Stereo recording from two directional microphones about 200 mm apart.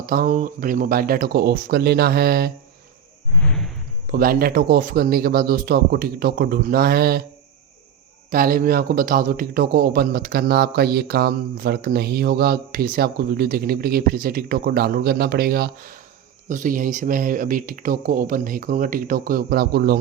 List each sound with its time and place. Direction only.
0.0 s a man's voice: 45° right (ahead or behind)
3.4 s a sound: 5° left (ahead or behind)
4.0 s a man's voice: 45° right (ahead or behind)
8.3 s a man's voice: 45° right (ahead or behind)